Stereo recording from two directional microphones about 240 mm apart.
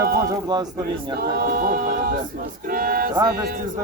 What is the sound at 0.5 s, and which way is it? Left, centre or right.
Speech, centre.